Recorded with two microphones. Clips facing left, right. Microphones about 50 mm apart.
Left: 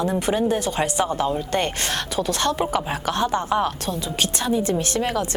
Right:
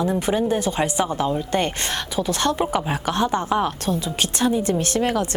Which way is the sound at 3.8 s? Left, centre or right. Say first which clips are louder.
Right 1 dB; right.